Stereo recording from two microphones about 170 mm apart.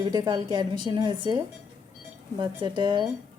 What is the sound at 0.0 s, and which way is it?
A woman's voice, 25° right (ahead or behind).